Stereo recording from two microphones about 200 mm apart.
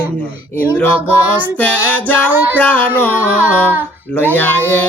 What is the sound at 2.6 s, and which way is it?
Music, 5° left (ahead or behind).